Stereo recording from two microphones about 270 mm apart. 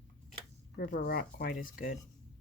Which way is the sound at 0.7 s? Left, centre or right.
Left.